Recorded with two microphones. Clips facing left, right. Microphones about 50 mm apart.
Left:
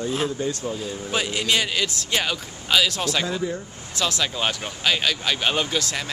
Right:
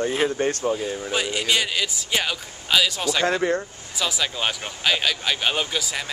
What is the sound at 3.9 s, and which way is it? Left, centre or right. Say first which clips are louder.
Speech: left 1 dB; centre.